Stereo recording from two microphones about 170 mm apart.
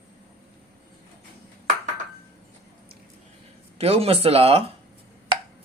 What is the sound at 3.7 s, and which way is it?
Speech, 35° right (ahead or behind).